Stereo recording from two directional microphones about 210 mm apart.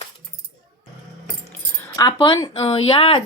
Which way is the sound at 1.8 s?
15° left (ahead or behind).